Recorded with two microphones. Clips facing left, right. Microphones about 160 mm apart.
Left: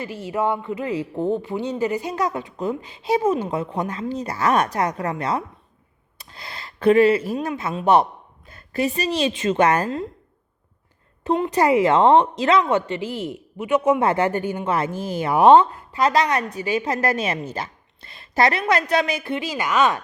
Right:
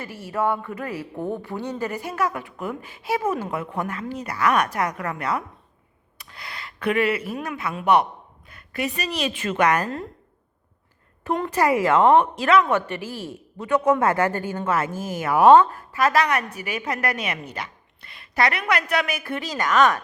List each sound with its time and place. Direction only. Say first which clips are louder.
0.0 s speech: left 2 dB; 15° left (ahead or behind)
11.3 s speech: left 3 dB; 20° left (ahead or behind)
14.1 s speech: left 2 dB; 20° left (ahead or behind)
14.8 s a woman's voice: left 2 dB; 30° left (ahead or behind)